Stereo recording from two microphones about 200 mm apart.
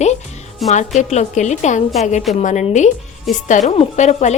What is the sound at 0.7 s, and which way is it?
A woman's voice, 35° left (ahead or behind).